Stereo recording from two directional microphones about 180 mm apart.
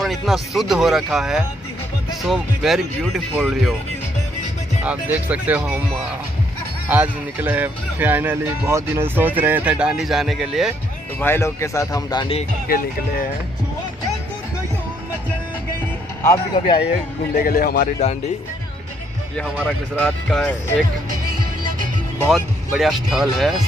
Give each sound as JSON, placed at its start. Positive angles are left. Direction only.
{"t": 0.0, "sound": "speech", "side_deg": 0}
{"t": 4.8, "sound": "speech", "side_deg": -10}
{"t": 6.9, "sound": "speech", "side_deg": -10}
{"t": 11.1, "sound": "speech", "side_deg": 15}
{"t": 12.6, "sound": "speech", "side_deg": 55}
{"t": 16.5, "sound": "speech", "side_deg": 25}
{"t": 16.8, "sound": "speech", "side_deg": 60}
{"t": 20.0, "sound": "speech", "side_deg": 5}
{"t": 22.3, "sound": "speech", "side_deg": 0}